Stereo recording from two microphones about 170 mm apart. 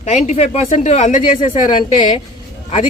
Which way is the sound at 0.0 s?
45° left (ahead or behind).